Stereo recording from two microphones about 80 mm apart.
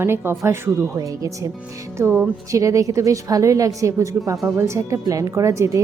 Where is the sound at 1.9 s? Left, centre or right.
Right.